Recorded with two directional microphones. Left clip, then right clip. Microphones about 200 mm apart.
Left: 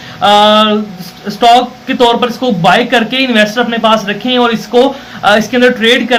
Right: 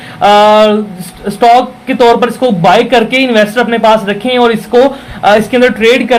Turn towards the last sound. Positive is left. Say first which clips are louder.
# right 1 dB
turn(degrees=-30)  # may be behind; listen again after turning